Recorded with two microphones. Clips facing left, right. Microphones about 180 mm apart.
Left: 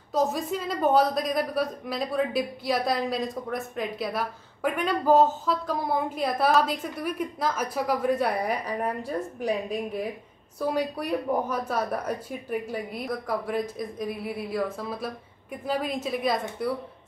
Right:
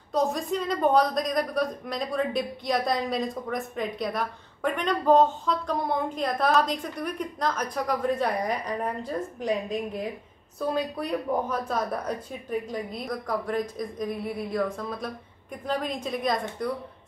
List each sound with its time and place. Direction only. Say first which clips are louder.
0.1 s a woman's voice: even; 5° left (ahead or behind)